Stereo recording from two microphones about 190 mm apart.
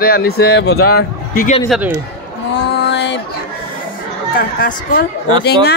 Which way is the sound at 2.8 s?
65° left (ahead or behind).